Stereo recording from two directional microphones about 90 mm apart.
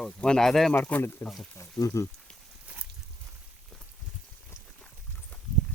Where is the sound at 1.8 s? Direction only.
40° left (ahead or behind).